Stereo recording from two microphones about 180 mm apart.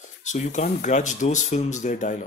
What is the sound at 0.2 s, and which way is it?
Speech, 40° left (ahead or behind).